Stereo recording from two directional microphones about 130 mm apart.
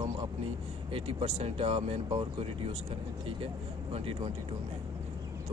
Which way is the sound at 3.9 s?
50° right (ahead or behind).